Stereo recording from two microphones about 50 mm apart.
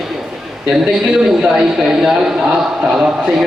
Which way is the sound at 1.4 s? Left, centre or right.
Centre.